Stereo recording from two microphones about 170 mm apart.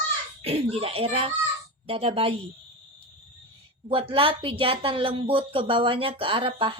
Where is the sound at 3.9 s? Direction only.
30° right (ahead or behind).